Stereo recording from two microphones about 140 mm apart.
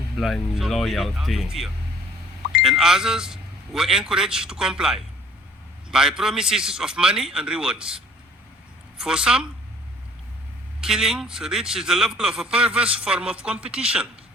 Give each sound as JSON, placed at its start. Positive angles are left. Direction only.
{"t": 0.2, "sound": "a man's voice", "side_deg": 0}
{"t": 10.8, "sound": "a man's voice", "side_deg": -5}